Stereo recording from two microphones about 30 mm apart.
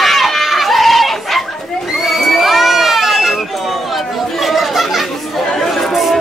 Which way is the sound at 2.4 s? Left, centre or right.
Centre.